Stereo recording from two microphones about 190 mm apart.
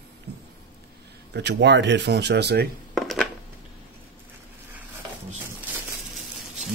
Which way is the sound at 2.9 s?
Centre (ahead or behind).